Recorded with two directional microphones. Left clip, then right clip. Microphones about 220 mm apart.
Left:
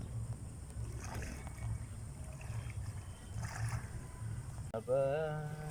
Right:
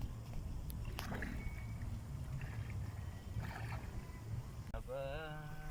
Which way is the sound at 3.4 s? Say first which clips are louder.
Left 3 dB; centre (ahead or behind).